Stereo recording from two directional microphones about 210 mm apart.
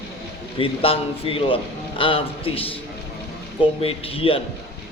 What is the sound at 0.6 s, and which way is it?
A man's voice, 25° left (ahead or behind).